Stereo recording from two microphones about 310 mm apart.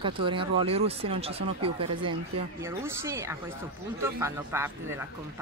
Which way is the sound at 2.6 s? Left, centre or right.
Centre.